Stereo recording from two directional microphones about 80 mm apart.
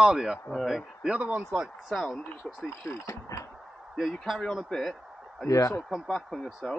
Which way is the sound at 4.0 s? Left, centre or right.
Centre.